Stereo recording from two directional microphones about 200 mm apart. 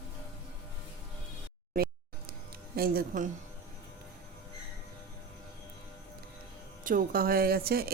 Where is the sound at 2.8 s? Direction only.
45° right (ahead or behind).